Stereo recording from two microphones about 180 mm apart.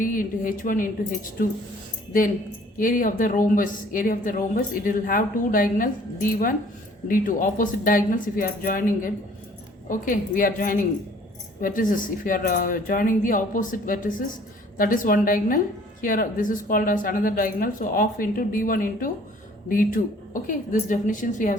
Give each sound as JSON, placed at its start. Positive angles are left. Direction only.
{"t": 0.0, "sound": "speech", "side_deg": 50}
{"t": 2.7, "sound": "speech", "side_deg": 50}